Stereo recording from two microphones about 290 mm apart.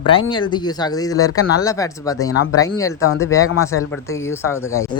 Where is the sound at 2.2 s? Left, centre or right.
Left.